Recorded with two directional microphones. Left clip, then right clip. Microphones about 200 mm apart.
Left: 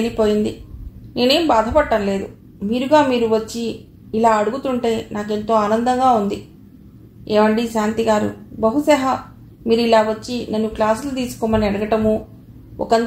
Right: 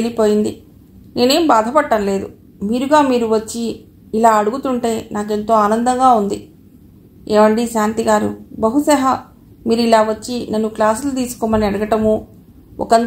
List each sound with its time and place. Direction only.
0.0 s a woman's voice: 35° right (ahead or behind)